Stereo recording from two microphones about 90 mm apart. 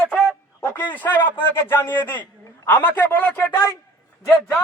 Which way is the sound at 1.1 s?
60° left (ahead or behind).